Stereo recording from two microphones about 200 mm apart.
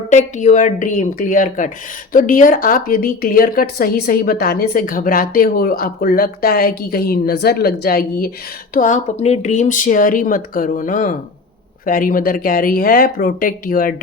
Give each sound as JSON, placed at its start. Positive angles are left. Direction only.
{"t": 0.1, "sound": "a woman's voice", "side_deg": 35}